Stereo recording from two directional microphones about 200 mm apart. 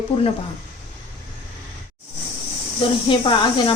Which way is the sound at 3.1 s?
25° left (ahead or behind).